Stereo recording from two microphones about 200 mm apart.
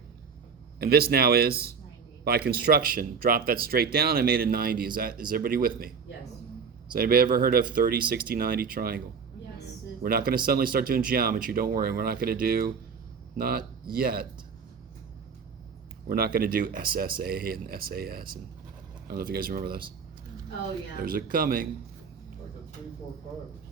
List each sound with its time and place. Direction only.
0.8 s speech: 50° right (ahead or behind)
6.9 s speech: 50° right (ahead or behind)
10.0 s speech: 45° right (ahead or behind)
16.0 s speech: 45° right (ahead or behind)
21.0 s speech: 45° right (ahead or behind)